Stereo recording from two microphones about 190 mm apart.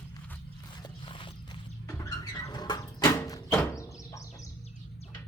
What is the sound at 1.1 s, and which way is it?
Clip-clop, 25° left (ahead or behind).